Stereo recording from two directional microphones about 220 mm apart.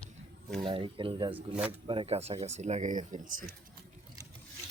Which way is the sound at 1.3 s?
5° right (ahead or behind).